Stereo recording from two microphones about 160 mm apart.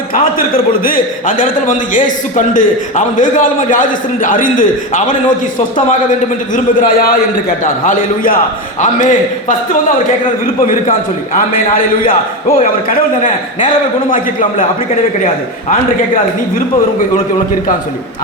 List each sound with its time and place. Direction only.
0.1 s a man's voice: 60° left (ahead or behind)
11.7 s a man's voice: 60° left (ahead or behind)